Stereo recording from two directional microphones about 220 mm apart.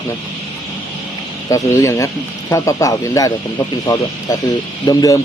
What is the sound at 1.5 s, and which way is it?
Speech, 15° left (ahead or behind).